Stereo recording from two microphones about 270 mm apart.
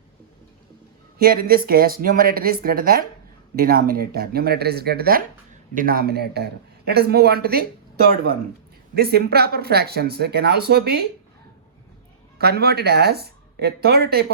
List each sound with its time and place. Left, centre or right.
1.2 s speech: right
12.4 s speech: right